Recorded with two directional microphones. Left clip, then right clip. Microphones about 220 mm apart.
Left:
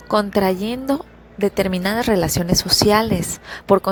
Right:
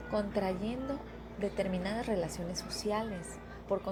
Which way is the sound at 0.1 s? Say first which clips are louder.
Left 16 dB; 45° left (ahead or behind).